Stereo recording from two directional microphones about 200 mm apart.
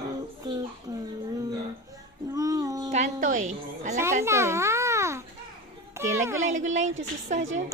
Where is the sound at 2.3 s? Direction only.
20° right (ahead or behind).